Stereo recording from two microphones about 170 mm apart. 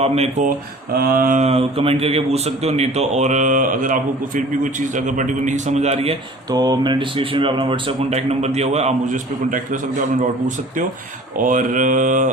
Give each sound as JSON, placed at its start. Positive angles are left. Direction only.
{"t": 0.0, "sound": "speech", "side_deg": -40}
{"t": 0.9, "sound": "speech", "side_deg": -60}
{"t": 6.5, "sound": "speech", "side_deg": -25}